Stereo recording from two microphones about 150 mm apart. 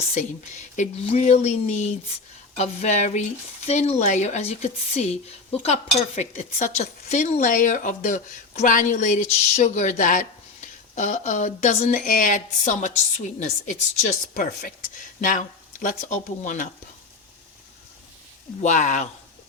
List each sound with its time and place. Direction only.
0.1 s speech: 50° left (ahead or behind)
18.6 s speech: 55° left (ahead or behind)